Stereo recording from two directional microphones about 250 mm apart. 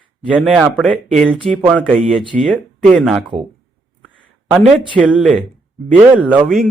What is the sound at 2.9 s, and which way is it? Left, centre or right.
Speech, centre.